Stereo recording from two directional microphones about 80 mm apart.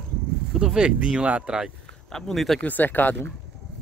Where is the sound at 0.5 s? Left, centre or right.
Centre.